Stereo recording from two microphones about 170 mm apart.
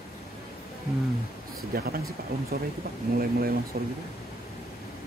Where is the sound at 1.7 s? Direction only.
60° right (ahead or behind).